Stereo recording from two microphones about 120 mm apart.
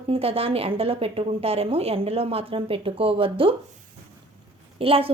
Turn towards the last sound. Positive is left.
turn(degrees=-50)  # may be behind; listen again after turning